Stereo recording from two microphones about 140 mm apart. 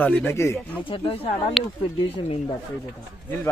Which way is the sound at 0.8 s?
40° left (ahead or behind).